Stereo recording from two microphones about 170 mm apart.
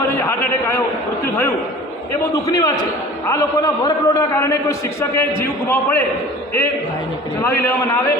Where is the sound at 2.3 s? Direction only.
20° left (ahead or behind).